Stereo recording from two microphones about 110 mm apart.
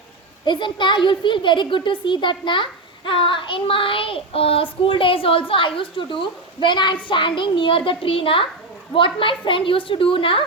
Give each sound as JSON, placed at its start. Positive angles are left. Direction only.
{"t": 0.4, "sound": "a child's voice", "side_deg": 45}